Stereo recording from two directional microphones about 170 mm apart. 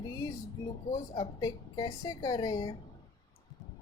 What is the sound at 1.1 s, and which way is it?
Speech, 25° left (ahead or behind).